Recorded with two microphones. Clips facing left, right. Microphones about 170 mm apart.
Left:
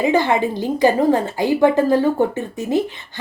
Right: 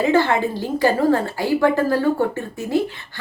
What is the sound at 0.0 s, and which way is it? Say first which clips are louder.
A woman's voice: left 1 dB; 15° left (ahead or behind).